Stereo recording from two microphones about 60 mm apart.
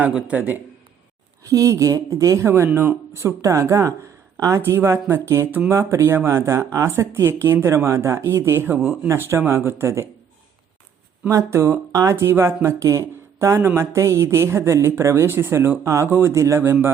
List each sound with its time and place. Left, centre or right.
0.3 s speech: right
1.5 s a woman's voice: right
4.6 s speech: right
11.5 s speech: right
11.9 s speech: right
12.1 s speech: right
15.8 s speech: right
16.0 s speech: right
16.3 s speech: right